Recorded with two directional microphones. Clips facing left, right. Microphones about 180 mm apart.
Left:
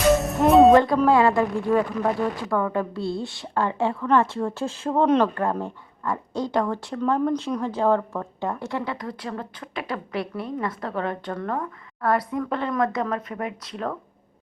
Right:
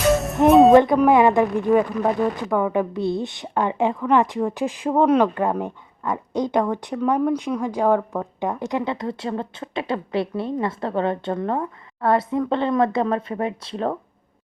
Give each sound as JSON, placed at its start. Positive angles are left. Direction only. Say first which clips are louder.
{"t": 0.1, "sound": "music", "louder": "right 1 dB", "side_deg": 0}
{"t": 0.5, "sound": "speech", "louder": "right 2 dB", "side_deg": 0}
{"t": 0.8, "sound": "a woman's voice", "louder": "right 3 dB", "side_deg": -20}